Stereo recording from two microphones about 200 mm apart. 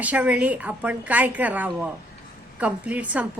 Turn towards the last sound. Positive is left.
turn(degrees=-5)  # may be behind; listen again after turning